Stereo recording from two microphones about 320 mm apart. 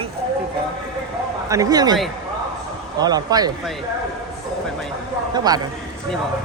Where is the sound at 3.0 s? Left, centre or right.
Centre.